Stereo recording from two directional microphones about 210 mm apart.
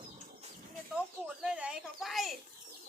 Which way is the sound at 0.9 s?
5° right (ahead or behind).